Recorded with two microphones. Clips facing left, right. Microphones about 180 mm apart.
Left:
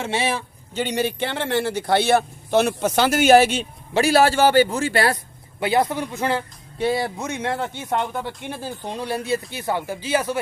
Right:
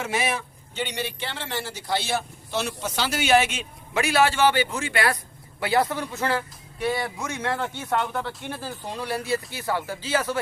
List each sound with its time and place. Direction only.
0.0 s a man's voice: 30° left (ahead or behind)
5.5 s speech: 20° left (ahead or behind)